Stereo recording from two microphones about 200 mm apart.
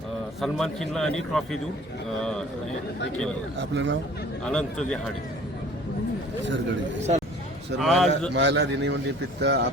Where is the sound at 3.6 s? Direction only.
60° right (ahead or behind).